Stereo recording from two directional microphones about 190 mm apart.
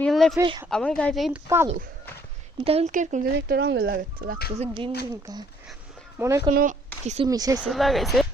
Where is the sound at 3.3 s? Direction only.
55° right (ahead or behind).